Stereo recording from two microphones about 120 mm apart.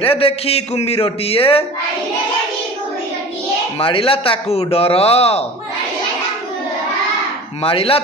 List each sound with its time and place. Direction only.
0.0 s speech: 55° left (ahead or behind)
3.7 s speech: 50° left (ahead or behind)
7.6 s speech: 50° left (ahead or behind)